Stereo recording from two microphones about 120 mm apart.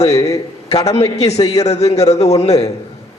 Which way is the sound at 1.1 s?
65° left (ahead or behind).